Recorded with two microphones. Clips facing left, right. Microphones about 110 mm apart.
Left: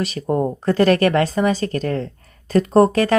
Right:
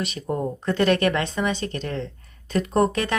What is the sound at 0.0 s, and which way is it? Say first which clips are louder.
Speech: left 6 dB; 35° left (ahead or behind).